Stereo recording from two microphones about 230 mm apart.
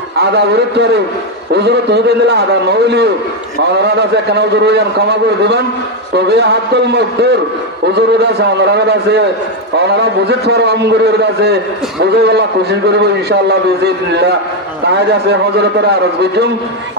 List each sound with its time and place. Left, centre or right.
0.2 s a man's voice: right
15.9 s a man's voice: right